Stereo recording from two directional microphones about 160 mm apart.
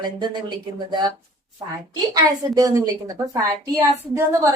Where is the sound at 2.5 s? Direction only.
20° right (ahead or behind).